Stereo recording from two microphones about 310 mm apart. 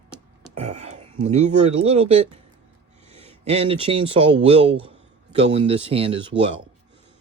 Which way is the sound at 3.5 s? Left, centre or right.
Centre.